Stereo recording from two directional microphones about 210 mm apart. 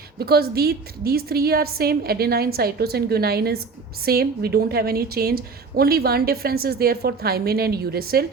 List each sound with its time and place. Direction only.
0.2 s a woman's voice: 50° right (ahead or behind)